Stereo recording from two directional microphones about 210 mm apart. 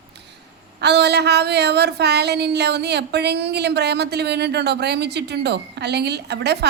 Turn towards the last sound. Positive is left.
turn(degrees=-50)  # may be behind; listen again after turning